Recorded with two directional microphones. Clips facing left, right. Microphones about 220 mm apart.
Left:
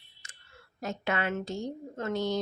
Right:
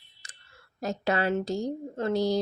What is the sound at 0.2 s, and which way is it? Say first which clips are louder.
Clicking: right 1 dB; 35° right (ahead or behind).